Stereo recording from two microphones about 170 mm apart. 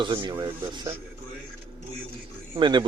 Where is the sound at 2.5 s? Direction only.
25° right (ahead or behind).